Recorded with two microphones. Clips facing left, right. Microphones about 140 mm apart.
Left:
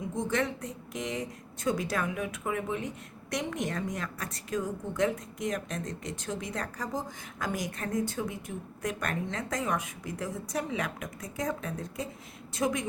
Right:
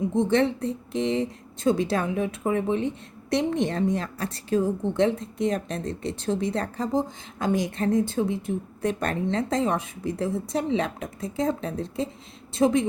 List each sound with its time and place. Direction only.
0.1 s a woman's voice: 30° right (ahead or behind)